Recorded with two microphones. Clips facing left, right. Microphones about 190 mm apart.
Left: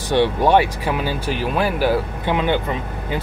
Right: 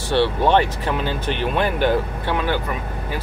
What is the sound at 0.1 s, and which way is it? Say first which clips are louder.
Speech: left 2 dB; 15° left (ahead or behind).